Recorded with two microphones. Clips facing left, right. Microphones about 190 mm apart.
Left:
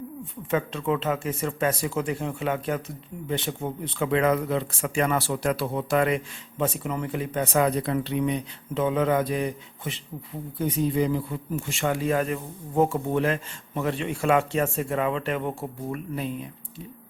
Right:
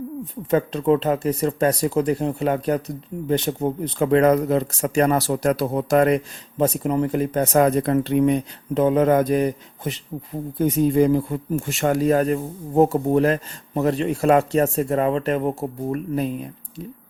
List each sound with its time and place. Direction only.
0.5 s speech: 40° right (ahead or behind)